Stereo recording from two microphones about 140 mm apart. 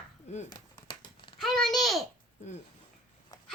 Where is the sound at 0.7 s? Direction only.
30° left (ahead or behind).